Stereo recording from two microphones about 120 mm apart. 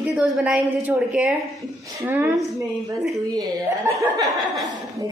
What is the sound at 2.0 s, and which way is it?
Speech, 20° right (ahead or behind).